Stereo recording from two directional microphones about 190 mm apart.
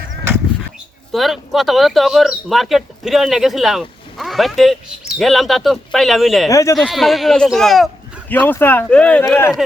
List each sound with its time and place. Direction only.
1.1 s speech: centre (ahead or behind)
6.5 s speech: 15° left (ahead or behind)
6.7 s speech: centre (ahead or behind)